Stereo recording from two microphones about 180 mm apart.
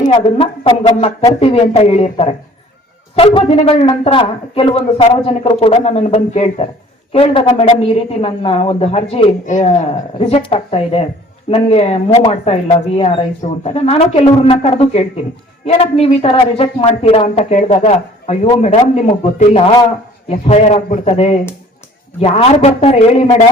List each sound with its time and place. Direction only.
0.1 s speech: 30° left (ahead or behind)